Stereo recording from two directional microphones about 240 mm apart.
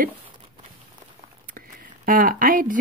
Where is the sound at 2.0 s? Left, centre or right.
Right.